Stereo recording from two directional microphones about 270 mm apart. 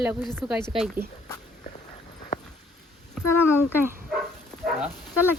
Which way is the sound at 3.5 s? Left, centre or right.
Centre.